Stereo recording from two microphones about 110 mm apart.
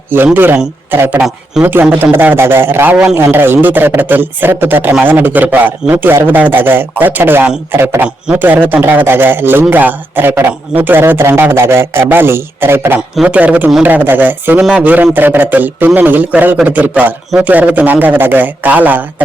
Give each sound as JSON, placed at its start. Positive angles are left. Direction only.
{"t": 0.3, "sound": "a man's voice", "side_deg": -20}